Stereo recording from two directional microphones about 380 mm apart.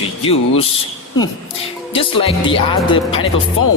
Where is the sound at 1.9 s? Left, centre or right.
Centre.